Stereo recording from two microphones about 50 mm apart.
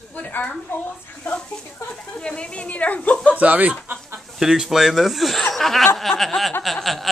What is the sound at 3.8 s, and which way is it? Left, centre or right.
Chicken, right.